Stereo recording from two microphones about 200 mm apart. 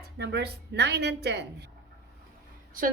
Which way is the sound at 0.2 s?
55° right (ahead or behind).